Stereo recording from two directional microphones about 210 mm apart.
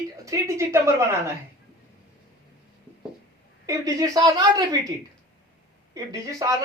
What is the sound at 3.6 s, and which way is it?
A woman's voice, 15° right (ahead or behind).